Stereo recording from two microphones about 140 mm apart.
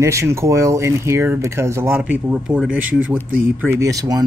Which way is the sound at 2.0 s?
10° right (ahead or behind).